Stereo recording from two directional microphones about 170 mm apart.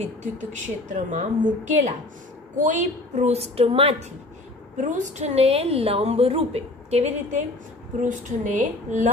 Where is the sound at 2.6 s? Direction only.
45° right (ahead or behind).